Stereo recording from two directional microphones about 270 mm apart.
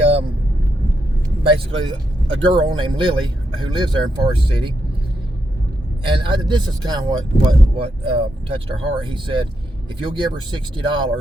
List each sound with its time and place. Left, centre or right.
0.0 s vehicle: right
1.5 s speech: centre
6.1 s speech: centre